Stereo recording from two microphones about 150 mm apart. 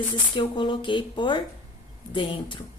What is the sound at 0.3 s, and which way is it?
A woman's voice, 30° left (ahead or behind).